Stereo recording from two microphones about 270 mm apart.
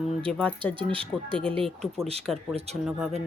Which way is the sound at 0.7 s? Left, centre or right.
Centre.